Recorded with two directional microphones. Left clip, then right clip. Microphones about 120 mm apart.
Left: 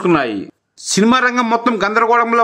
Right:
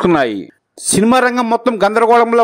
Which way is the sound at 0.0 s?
60° right (ahead or behind).